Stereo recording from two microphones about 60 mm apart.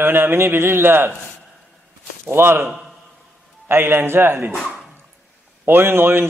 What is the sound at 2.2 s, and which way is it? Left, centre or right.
A man's voice, right.